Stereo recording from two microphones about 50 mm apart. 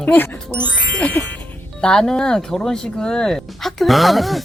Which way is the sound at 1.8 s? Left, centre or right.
Centre.